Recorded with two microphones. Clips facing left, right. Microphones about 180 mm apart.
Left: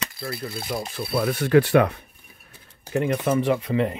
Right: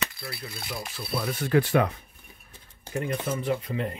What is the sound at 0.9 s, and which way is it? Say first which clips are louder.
Speech: left 6 dB; 60° left (ahead or behind).